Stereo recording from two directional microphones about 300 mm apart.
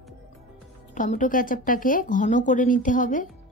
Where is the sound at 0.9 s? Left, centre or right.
Left.